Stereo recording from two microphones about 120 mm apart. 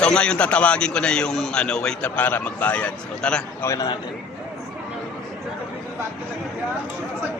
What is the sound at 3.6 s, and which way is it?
Speech, 25° left (ahead or behind).